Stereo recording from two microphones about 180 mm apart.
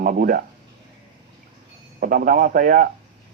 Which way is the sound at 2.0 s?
50° right (ahead or behind).